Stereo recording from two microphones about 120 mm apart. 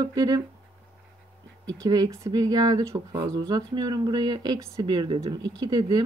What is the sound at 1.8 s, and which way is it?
Speech, 30° right (ahead or behind).